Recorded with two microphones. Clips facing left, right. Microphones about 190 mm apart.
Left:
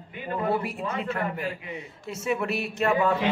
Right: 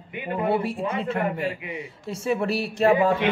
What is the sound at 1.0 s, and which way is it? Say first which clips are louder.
Speech: right 3 dB; 30° right (ahead or behind).